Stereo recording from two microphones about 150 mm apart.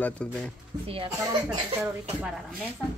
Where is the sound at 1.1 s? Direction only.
20° right (ahead or behind).